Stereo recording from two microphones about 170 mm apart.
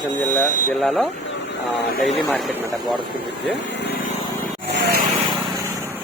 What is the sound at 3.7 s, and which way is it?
Vehicle, 80° left.